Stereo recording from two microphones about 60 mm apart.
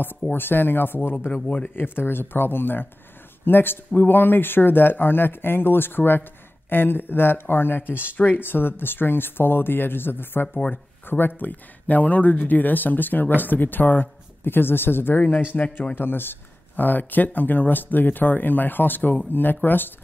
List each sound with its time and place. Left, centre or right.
0.3 s speech: left
1.3 s speech: left
1.8 s speech: left
15.5 s speech: left
15.9 s speech: left